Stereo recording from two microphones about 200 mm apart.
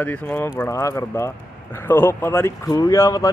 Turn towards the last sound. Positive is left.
turn(degrees=15)  # may be behind; listen again after turning